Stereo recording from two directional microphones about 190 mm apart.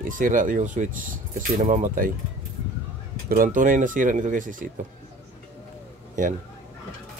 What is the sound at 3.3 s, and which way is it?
Speech, 45° right (ahead or behind).